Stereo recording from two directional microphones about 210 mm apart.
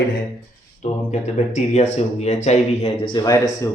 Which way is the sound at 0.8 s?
35° left (ahead or behind).